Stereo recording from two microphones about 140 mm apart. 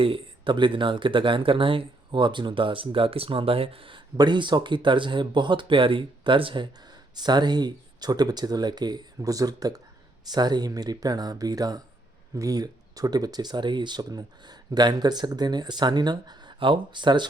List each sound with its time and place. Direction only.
0.0 s speech: 35° right (ahead or behind)